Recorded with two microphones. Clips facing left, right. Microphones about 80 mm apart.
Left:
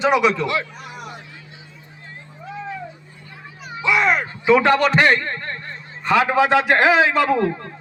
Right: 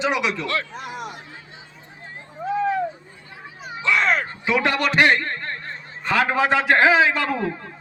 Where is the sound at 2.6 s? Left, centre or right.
Right.